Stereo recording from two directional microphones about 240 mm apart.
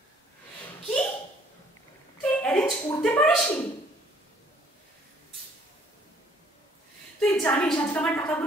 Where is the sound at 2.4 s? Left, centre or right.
Centre.